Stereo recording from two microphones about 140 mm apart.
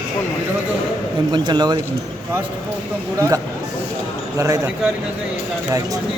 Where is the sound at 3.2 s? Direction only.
20° right (ahead or behind).